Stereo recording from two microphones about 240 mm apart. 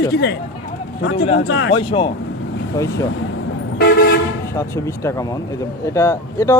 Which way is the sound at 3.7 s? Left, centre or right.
Left.